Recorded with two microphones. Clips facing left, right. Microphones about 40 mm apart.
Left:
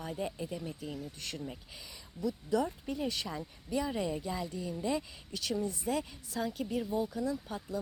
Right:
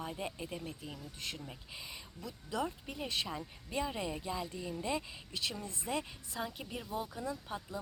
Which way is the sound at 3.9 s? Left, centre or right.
Centre.